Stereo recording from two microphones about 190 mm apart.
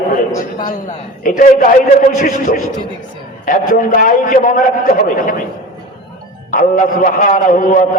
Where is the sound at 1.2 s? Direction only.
45° left (ahead or behind).